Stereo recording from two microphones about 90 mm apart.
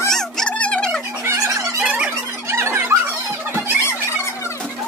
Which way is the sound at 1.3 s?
40° right (ahead or behind).